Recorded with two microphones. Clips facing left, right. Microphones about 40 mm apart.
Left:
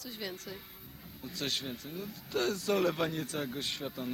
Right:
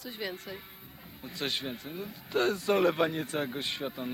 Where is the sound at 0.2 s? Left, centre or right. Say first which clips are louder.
Right 4 dB; right.